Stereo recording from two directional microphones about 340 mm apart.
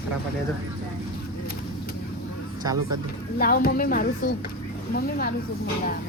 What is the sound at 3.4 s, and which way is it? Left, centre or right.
Speech, left.